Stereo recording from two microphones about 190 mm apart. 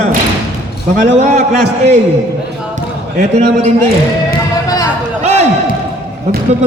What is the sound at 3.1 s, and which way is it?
Speech, 40° right (ahead or behind).